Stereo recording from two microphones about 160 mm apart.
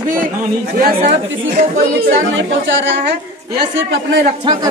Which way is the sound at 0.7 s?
60° right (ahead or behind).